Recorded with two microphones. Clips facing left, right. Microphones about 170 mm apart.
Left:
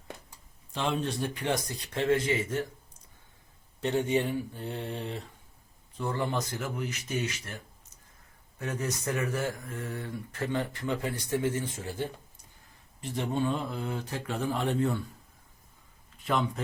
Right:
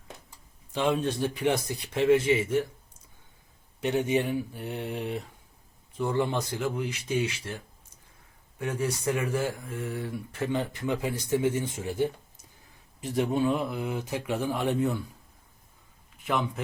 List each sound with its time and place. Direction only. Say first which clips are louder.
1.4 s speech: right 4 dB; 10° right (ahead or behind)
3.8 s speech: right 1 dB; 15° right (ahead or behind)
16.2 s speech: even; 10° right (ahead or behind)